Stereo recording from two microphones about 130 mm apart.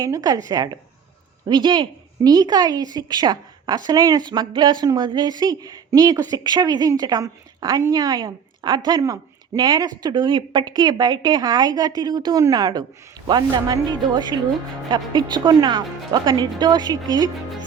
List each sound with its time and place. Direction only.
0.0 s a woman's voice: 25° right (ahead or behind)